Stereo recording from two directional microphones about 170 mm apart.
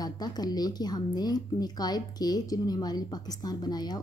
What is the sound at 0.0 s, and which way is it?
Speech, 25° left (ahead or behind).